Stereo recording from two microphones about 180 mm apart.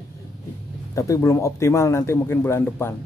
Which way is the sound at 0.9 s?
15° left (ahead or behind).